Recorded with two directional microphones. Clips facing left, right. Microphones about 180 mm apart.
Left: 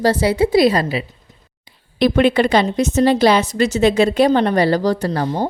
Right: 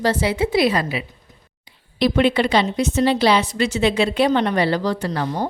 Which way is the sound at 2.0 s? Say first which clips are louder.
Left 3 dB; 50° left (ahead or behind).